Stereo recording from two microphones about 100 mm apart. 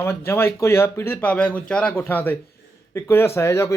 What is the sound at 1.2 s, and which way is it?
Speech, 15° left (ahead or behind).